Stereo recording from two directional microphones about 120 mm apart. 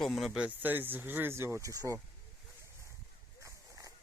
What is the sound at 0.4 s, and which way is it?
Speech, 15° right (ahead or behind).